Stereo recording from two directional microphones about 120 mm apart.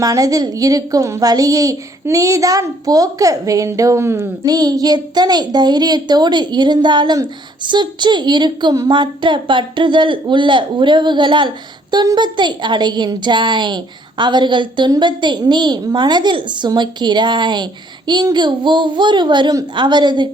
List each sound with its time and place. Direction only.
0.0 s a woman's voice: 30° right (ahead or behind)